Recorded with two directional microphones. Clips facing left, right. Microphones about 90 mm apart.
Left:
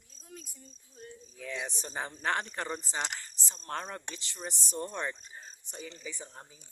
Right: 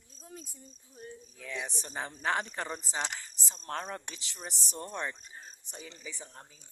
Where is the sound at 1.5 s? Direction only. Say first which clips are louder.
Even; centre (ahead or behind).